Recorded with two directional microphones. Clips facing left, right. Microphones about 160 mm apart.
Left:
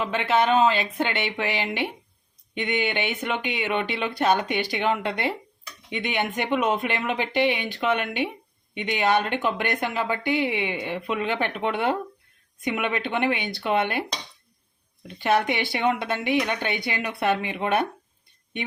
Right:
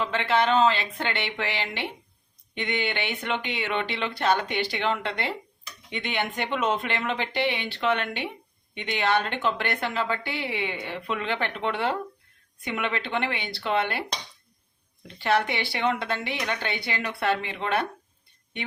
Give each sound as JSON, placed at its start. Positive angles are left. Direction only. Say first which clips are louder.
{"t": 0.0, "sound": "a woman's voice", "louder": "left 2 dB", "side_deg": 15}
{"t": 15.0, "sound": "a woman's voice", "louder": "left 2 dB", "side_deg": 15}